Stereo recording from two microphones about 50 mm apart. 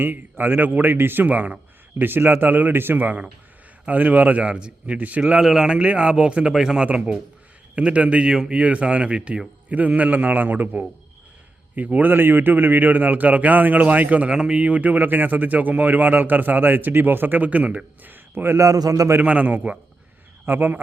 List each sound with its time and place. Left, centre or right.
0.0 s speech: right
2.0 s speech: right
5.2 s a man's voice: centre; by 12.1 s right
12.1 s speech: right
14.3 s speech: centre
14.6 s speech: right
18.5 s a man's voice: right
19.2 s speech: right